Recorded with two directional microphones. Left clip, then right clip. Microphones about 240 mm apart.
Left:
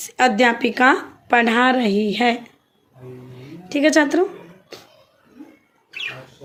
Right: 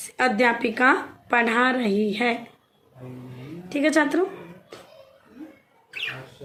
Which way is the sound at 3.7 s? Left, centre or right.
Left.